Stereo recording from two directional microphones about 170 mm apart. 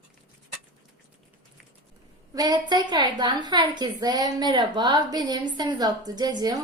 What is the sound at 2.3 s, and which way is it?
A woman's voice, 25° right (ahead or behind).